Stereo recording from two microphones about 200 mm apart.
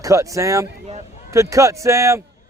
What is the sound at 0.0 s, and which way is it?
A man's voice, 15° right (ahead or behind).